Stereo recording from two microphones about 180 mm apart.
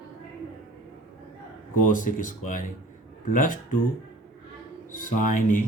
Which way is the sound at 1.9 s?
45° left (ahead or behind).